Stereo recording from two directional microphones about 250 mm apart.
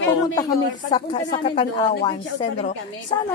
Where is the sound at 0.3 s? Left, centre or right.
Centre.